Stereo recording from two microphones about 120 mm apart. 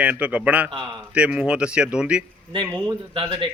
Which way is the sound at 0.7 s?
40° right (ahead or behind).